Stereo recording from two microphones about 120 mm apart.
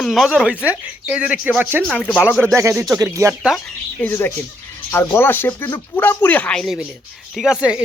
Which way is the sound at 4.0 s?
15° left (ahead or behind).